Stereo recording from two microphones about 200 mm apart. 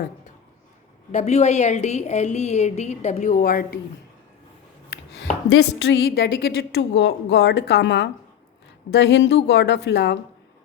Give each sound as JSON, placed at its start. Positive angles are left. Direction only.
{"t": 1.1, "sound": "a woman's voice", "side_deg": 35}
{"t": 5.9, "sound": "a woman's voice", "side_deg": 50}